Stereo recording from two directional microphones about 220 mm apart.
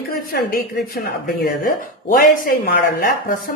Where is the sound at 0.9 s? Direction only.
40° left (ahead or behind).